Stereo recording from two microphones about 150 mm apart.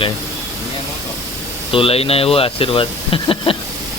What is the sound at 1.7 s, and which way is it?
Speech, 40° left (ahead or behind).